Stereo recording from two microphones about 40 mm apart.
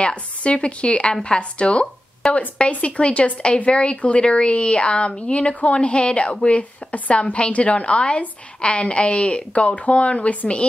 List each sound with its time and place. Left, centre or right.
0.0 s a woman's voice: left
2.2 s a woman's voice: centre
2.7 s a woman's voice: left